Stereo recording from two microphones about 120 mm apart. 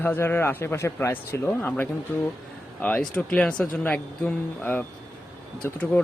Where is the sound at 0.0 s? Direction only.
15° left (ahead or behind).